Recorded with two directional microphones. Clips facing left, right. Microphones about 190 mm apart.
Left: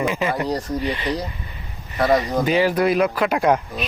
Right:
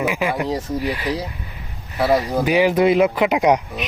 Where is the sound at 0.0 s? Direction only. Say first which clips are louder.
Right 1 dB; 5° right (ahead or behind).